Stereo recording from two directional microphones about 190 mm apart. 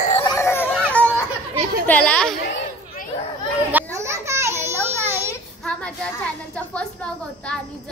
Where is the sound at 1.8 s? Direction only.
5° left (ahead or behind).